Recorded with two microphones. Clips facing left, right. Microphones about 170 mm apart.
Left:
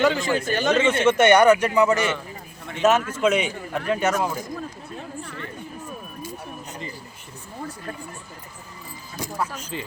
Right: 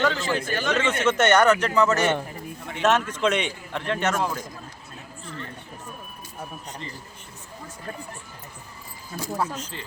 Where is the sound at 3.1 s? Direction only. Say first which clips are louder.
Left 3 dB; 10° left (ahead or behind).